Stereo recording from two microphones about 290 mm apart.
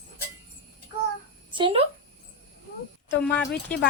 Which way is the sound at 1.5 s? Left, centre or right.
Centre.